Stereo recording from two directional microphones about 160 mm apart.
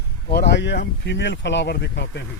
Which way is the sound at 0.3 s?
90° left.